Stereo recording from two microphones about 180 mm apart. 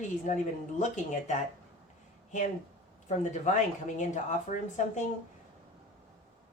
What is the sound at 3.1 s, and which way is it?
Speech, 40° left (ahead or behind).